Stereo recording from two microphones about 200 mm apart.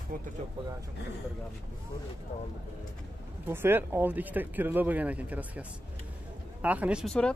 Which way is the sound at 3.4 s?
10° right (ahead or behind).